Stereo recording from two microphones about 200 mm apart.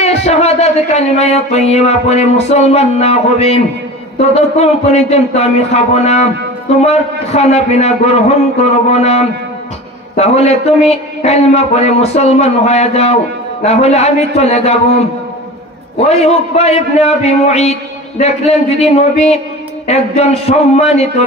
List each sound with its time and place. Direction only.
0.0 s music: 30° left (ahead or behind)
16.1 s music: 30° left (ahead or behind)